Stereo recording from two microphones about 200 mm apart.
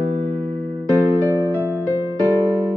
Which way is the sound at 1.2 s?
15° right (ahead or behind).